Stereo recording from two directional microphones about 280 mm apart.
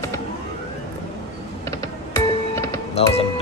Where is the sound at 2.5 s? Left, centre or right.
Centre.